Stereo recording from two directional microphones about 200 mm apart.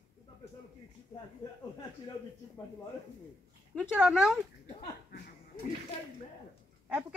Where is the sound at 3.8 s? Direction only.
5° right (ahead or behind).